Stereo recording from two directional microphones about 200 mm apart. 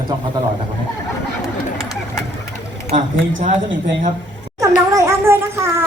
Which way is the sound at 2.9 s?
40° right (ahead or behind).